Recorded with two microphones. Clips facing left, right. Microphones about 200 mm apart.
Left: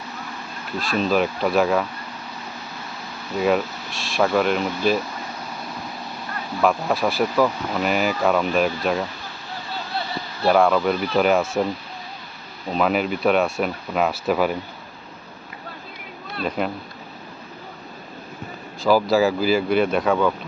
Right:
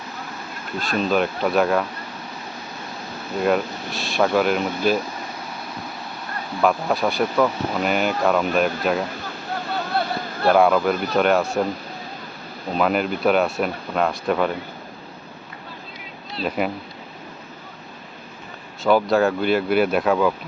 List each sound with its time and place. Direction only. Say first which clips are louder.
0.8 s speech: even; centre (ahead or behind)
3.3 s speech: even; centre (ahead or behind)
6.6 s speech: even; centre (ahead or behind)
9.6 s a sound: right 5 dB; 55° right (ahead or behind)
10.5 s speech: right 1 dB; 5° right (ahead or behind)
10.9 s speech: even; 45° right (ahead or behind)
11.2 s speech: even; centre (ahead or behind)
12.7 s speech: even; centre (ahead or behind)
16.4 s speech: right 1 dB; 5° right (ahead or behind)
18.8 s speech: even; centre (ahead or behind)